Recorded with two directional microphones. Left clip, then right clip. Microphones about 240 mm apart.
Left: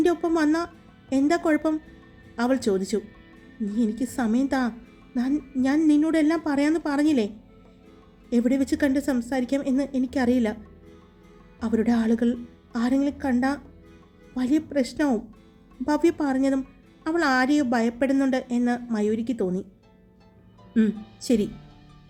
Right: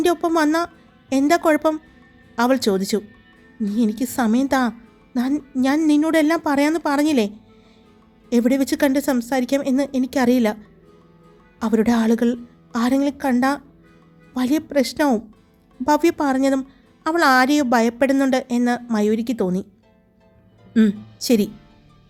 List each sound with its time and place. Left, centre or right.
0.0 s a woman's voice: right
8.3 s a woman's voice: right
11.6 s a woman's voice: right
20.7 s speech: right